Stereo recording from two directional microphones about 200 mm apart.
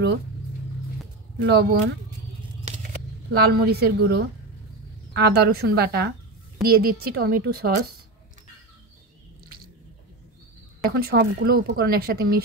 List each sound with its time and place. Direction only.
1.4 s speech: 55° right (ahead or behind)
3.3 s speech: 55° right (ahead or behind)
10.9 s speech: 55° right (ahead or behind)